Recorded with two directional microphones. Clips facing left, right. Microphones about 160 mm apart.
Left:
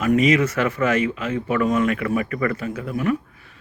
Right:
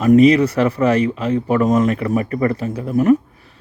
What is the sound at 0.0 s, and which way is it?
Speech, 35° right (ahead or behind).